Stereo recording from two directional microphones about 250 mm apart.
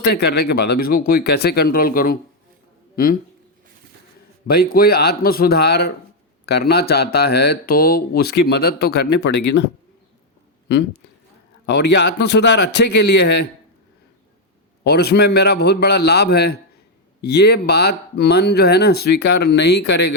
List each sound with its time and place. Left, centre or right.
0.0 s a man's voice: left
4.4 s speech: left
11.6 s speech: left
14.8 s speech: left